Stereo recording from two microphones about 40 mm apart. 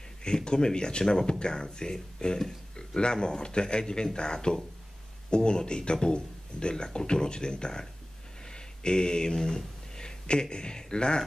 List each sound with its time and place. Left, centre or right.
0.2 s speech: left